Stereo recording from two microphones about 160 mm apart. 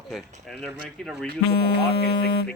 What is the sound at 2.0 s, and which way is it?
Speech, 90° left.